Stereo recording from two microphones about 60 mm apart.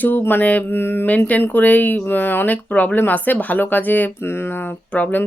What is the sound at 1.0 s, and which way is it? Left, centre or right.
Speech, left.